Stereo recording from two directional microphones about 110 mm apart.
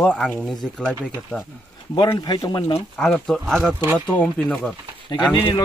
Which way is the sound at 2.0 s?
40° left (ahead or behind).